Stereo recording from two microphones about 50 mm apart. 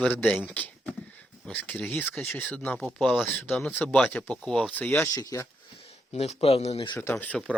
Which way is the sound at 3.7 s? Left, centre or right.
Left.